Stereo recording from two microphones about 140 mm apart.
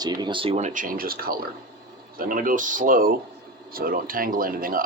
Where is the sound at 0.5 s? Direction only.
60° right (ahead or behind); by 1.5 s 90° right.